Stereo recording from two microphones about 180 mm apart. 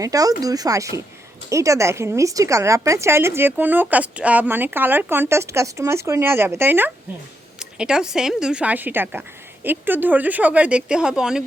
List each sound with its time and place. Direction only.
0.0 s a woman's voice: 20° right (ahead or behind); by 11.4 s 5° right (ahead or behind)